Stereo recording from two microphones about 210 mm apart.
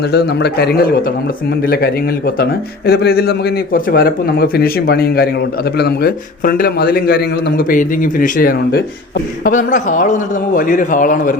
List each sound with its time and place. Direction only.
0.1 s a man's voice: 50° left (ahead or behind)